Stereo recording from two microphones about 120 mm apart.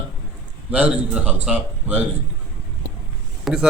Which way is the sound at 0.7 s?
10° right (ahead or behind).